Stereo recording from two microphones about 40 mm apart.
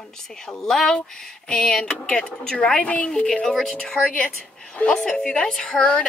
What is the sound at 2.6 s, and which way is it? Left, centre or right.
Speech, left.